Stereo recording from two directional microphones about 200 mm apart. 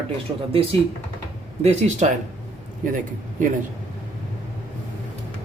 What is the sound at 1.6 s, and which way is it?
Speech, 35° right (ahead or behind).